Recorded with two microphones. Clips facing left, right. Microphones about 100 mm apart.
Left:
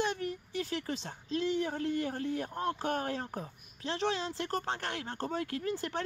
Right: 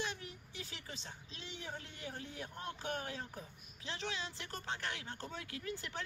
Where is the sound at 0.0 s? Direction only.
50° left (ahead or behind).